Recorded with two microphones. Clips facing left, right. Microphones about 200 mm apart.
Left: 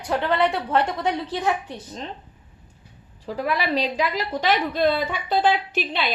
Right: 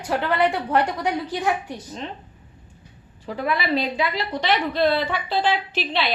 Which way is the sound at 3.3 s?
40° left (ahead or behind).